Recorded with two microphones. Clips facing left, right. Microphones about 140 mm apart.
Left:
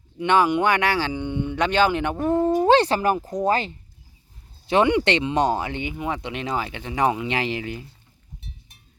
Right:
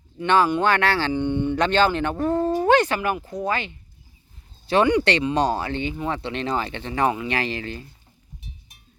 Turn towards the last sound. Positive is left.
turn(degrees=15)  # may be behind; listen again after turning